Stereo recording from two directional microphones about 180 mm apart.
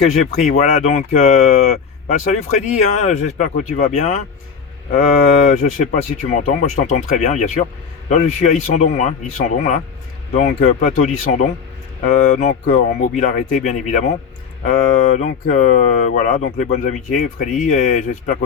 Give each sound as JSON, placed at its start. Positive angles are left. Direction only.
{"t": 0.1, "sound": "speech", "side_deg": 40}
{"t": 4.9, "sound": "speech", "side_deg": 50}